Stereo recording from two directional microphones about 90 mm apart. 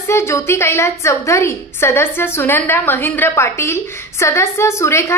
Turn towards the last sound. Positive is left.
turn(degrees=30)  # may be behind; listen again after turning